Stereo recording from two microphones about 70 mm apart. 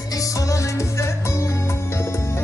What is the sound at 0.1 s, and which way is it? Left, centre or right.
Music, left.